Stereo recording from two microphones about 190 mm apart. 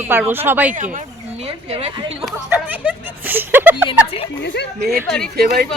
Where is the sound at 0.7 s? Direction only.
45° right (ahead or behind).